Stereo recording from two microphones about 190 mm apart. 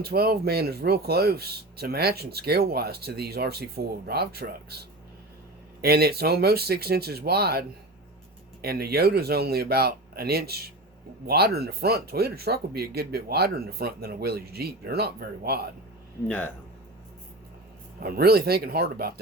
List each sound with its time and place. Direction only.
0.0 s speech: 55° right (ahead or behind)
8.6 s speech: 55° right (ahead or behind)
18.0 s speech: 55° right (ahead or behind)